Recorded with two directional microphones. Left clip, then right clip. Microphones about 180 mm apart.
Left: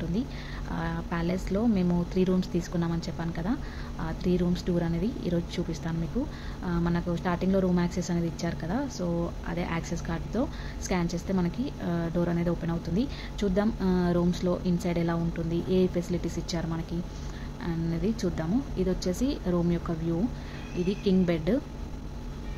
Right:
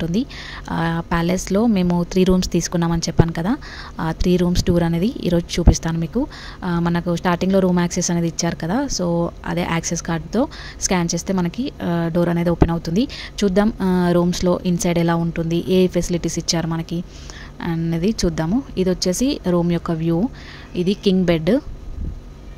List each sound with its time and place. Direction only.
0.7 s speech: 60° right (ahead or behind)